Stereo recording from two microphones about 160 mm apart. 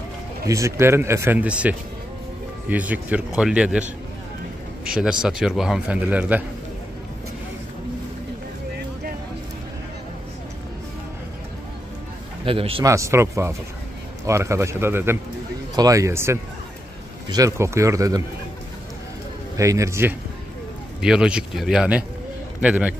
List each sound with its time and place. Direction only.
0.5 s speech: 20° right (ahead or behind)
4.8 s a man's voice: 5° right (ahead or behind)
12.4 s a man's voice: 35° right (ahead or behind)
12.8 s speech: 20° right (ahead or behind)
19.5 s speech: 20° right (ahead or behind)
21.0 s speech: 5° right (ahead or behind)